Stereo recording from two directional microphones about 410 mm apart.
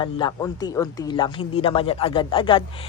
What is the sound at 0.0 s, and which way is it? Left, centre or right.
Speech, centre.